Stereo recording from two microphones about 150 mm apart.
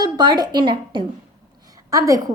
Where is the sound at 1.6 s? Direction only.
25° right (ahead or behind).